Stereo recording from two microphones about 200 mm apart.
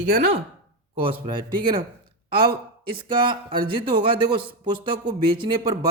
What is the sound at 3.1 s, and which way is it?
Speech, 25° right (ahead or behind).